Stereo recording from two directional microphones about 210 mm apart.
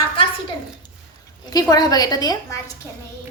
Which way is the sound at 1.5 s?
20° left (ahead or behind).